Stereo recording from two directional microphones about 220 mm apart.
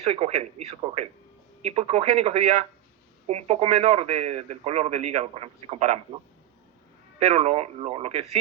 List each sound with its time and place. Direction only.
0.0 s a man's voice: 30° right (ahead or behind)
7.3 s a man's voice: 30° right (ahead or behind)